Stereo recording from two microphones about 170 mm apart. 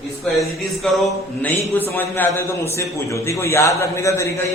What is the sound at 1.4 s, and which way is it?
A man's voice, 10° left (ahead or behind).